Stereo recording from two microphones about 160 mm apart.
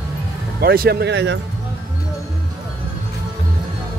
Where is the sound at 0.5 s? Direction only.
70° right (ahead or behind); by 1.4 s 90° right.